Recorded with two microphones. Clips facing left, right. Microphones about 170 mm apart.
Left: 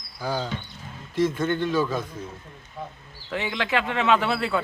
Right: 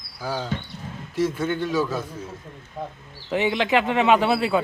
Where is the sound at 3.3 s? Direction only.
20° right (ahead or behind).